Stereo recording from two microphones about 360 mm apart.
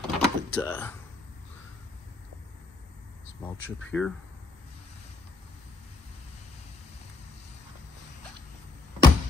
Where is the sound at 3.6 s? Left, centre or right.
Left.